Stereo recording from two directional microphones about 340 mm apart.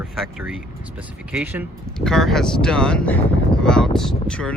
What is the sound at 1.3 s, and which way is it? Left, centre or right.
Speech, centre.